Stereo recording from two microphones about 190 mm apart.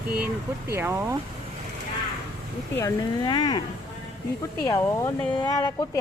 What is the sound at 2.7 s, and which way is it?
Speech, 20° left (ahead or behind).